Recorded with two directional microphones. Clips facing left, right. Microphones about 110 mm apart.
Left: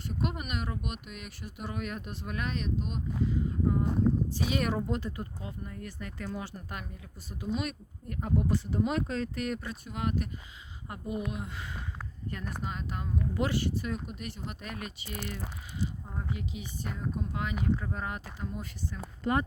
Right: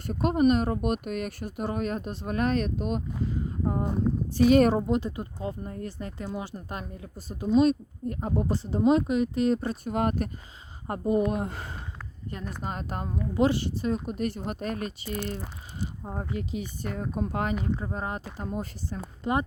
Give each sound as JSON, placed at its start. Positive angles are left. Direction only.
{"t": 0.1, "sound": "speech", "side_deg": -40}
{"t": 4.4, "sound": "speech", "side_deg": -45}
{"t": 4.7, "sound": "speech", "side_deg": -25}
{"t": 5.5, "sound": "speech", "side_deg": -35}
{"t": 9.8, "sound": "speech", "side_deg": -45}
{"t": 12.3, "sound": "speech", "side_deg": -25}
{"t": 12.6, "sound": "speech", "side_deg": -45}
{"t": 13.3, "sound": "speech", "side_deg": -25}
{"t": 16.4, "sound": "speech", "side_deg": -45}
{"t": 17.6, "sound": "speech", "side_deg": -30}
{"t": 18.3, "sound": "speech", "side_deg": -40}
{"t": 19.2, "sound": "speech", "side_deg": -20}